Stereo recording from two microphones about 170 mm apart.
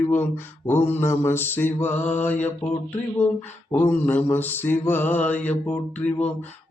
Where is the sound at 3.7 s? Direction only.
10° left (ahead or behind).